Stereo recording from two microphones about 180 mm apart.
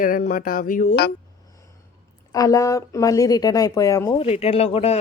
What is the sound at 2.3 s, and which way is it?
Speech, 20° left (ahead or behind).